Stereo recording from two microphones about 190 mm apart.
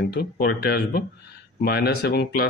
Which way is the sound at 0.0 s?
55° left (ahead or behind).